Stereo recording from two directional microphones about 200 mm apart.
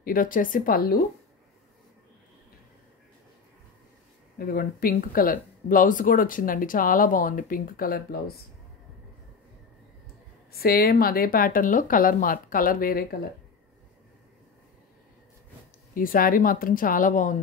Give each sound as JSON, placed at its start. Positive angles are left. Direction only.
{"t": 0.0, "sound": "speech", "side_deg": 45}
{"t": 4.4, "sound": "speech", "side_deg": 45}
{"t": 10.5, "sound": "speech", "side_deg": 50}
{"t": 15.9, "sound": "speech", "side_deg": 45}